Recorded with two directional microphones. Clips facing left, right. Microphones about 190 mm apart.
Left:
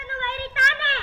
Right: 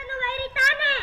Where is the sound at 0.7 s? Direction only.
5° right (ahead or behind).